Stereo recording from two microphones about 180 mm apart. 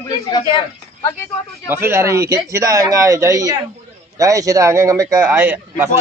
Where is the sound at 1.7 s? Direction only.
15° right (ahead or behind).